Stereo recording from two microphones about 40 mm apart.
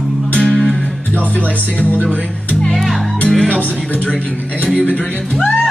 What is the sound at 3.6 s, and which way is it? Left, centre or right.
Music, left.